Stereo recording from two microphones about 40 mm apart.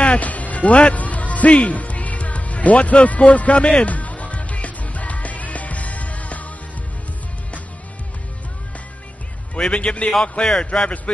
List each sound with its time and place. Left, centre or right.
0.0 s music: left
9.6 s a man's voice: left